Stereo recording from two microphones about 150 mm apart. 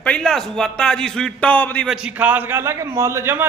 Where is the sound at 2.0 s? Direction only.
10° right (ahead or behind).